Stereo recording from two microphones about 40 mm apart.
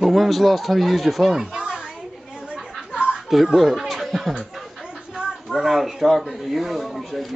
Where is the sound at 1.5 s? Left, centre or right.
Centre.